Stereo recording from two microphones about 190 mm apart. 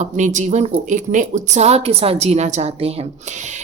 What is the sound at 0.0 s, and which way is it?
Speech, 40° right (ahead or behind).